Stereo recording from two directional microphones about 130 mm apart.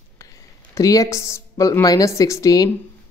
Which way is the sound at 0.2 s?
25° left (ahead or behind).